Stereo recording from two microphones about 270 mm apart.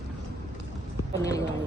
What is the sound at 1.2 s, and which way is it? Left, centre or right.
Speech, centre.